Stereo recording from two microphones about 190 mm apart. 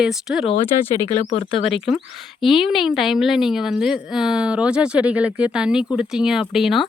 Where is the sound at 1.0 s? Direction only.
35° left (ahead or behind).